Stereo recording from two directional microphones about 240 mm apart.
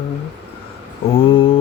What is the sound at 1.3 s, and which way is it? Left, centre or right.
Mantra, left.